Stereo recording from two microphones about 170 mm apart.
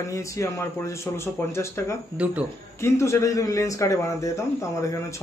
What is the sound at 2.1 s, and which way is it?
Speech, 10° right (ahead or behind).